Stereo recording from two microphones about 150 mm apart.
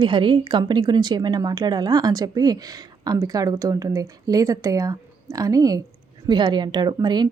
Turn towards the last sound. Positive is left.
turn(degrees=-30)  # may be behind; listen again after turning